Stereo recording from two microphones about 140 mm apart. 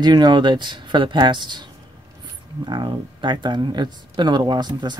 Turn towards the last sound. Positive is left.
turn(degrees=-30)  # may be behind; listen again after turning